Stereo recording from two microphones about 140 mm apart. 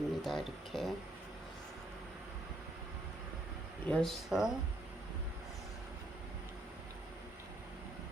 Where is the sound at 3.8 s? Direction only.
5° left (ahead or behind).